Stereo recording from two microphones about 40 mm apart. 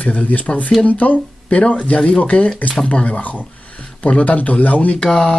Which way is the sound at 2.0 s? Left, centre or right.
Left.